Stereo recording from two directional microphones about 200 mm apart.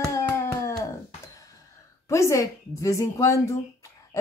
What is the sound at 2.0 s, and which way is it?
Speech, 15° left (ahead or behind).